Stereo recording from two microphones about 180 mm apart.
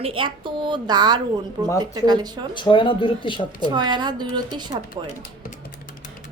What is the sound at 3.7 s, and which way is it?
A woman's voice, 25° right (ahead or behind).